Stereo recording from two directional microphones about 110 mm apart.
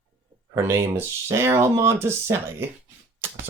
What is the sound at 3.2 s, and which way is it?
Typewriter, 20° right (ahead or behind).